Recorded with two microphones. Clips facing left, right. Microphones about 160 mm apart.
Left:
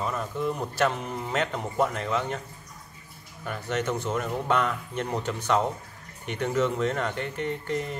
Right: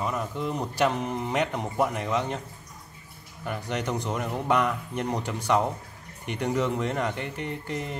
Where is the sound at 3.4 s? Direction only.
15° right (ahead or behind).